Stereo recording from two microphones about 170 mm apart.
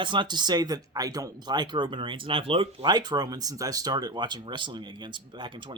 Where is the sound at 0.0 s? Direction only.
25° right (ahead or behind).